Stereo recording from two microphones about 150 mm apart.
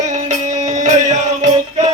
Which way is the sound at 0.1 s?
50° right (ahead or behind).